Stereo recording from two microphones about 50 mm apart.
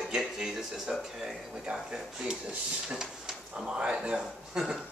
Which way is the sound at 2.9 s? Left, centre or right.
Centre.